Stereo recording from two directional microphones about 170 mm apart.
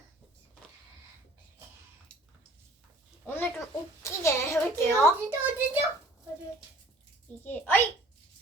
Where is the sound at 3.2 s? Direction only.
10° left (ahead or behind).